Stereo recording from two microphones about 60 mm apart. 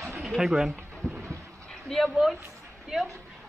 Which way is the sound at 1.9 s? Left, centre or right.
Centre.